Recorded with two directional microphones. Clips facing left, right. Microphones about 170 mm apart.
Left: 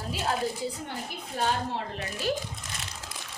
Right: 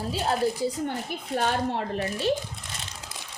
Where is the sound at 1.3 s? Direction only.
75° right (ahead or behind).